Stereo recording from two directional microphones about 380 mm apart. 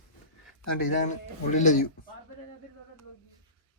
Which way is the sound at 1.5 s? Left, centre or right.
Centre.